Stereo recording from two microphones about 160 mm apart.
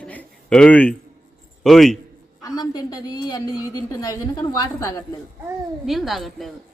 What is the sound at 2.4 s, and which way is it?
A woman's voice, 25° left (ahead or behind).